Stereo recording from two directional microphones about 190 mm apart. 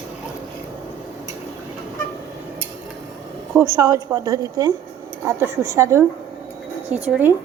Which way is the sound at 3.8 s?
15° right (ahead or behind).